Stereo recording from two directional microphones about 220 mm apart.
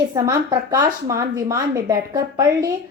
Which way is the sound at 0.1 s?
15° right (ahead or behind).